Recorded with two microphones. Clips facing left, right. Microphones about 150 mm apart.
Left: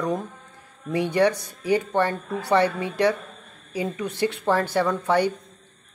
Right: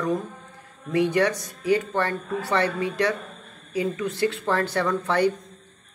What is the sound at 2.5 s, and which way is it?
Speech, 15° left (ahead or behind).